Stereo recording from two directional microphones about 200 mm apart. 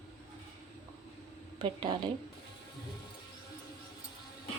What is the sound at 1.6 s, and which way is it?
Speech, 25° right (ahead or behind).